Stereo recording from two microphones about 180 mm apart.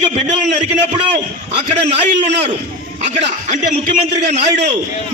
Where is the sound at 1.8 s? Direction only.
40° right (ahead or behind).